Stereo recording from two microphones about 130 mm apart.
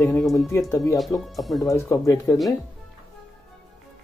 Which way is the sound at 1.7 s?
25° left (ahead or behind).